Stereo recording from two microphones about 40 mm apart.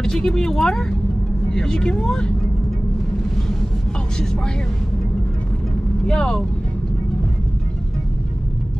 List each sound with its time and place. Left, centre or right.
0.0 s speech: centre
6.0 s speech: centre